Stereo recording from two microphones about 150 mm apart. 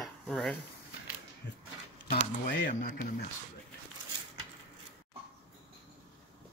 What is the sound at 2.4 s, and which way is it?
Speech, 60° left (ahead or behind).